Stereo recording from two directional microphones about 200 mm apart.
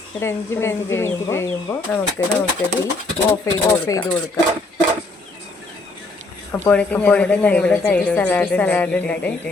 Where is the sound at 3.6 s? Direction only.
20° left (ahead or behind).